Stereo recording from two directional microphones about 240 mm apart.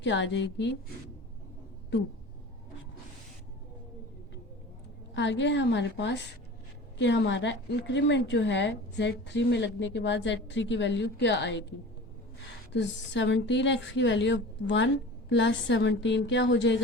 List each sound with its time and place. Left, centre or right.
0.0 s speech: left
5.1 s speech: left
12.7 s speech: left